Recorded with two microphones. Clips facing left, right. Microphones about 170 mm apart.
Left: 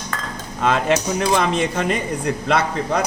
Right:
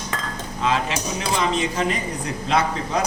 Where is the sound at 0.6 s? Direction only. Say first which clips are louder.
Left 5 dB; 55° left (ahead or behind).